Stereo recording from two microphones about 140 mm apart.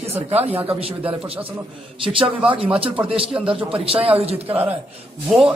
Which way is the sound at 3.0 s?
40° right (ahead or behind).